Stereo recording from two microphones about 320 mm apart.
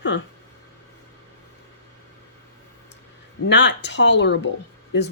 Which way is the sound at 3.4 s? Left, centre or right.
Left.